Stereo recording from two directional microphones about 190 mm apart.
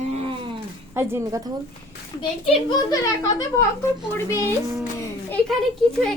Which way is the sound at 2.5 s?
25° left (ahead or behind).